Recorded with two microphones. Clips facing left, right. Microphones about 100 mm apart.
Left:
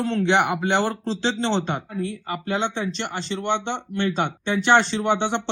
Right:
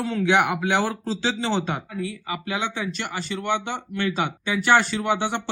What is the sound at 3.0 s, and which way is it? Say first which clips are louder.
Speech: left 1 dB; 25° left (ahead or behind).